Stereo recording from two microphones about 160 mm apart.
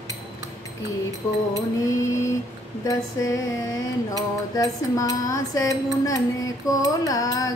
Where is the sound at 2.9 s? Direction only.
20° left (ahead or behind).